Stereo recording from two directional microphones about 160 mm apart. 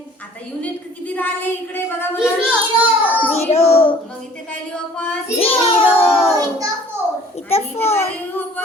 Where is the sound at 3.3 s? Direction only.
40° left (ahead or behind).